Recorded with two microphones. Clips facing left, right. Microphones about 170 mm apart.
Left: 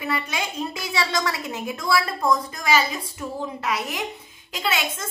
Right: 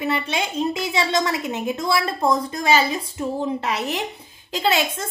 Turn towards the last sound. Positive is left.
turn(degrees=-35)  # may be behind; listen again after turning